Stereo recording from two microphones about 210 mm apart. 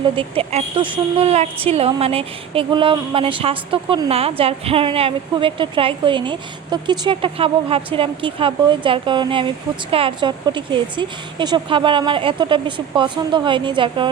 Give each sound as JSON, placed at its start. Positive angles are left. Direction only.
{"t": 0.0, "sound": "speech", "side_deg": -25}